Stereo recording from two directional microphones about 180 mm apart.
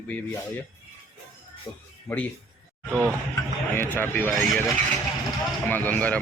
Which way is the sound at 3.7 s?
10° left (ahead or behind).